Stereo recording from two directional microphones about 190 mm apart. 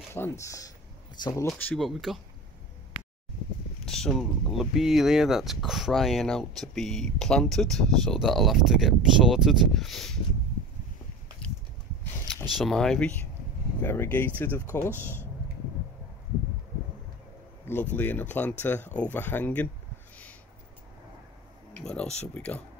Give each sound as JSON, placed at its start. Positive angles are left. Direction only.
{"t": 0.1, "sound": "speech", "side_deg": 15}
{"t": 1.5, "sound": "speech", "side_deg": 0}
{"t": 2.9, "sound": "a sound", "side_deg": -30}
{"t": 3.8, "sound": "speech", "side_deg": 0}
{"t": 11.4, "sound": "walk", "side_deg": 5}
{"t": 12.5, "sound": "speech", "side_deg": 0}
{"t": 17.9, "sound": "speech", "side_deg": 10}
{"t": 21.8, "sound": "speech", "side_deg": 5}